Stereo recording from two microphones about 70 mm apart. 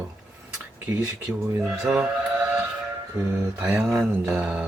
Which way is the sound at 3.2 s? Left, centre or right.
Centre.